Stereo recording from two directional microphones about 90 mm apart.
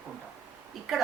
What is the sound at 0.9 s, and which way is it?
Speech, 5° right (ahead or behind).